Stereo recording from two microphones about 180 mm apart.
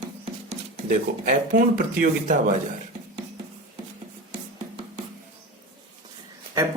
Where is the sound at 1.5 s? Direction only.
50° right (ahead or behind).